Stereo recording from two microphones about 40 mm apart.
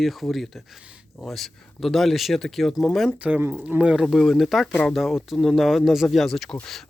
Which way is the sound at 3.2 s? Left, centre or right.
Right.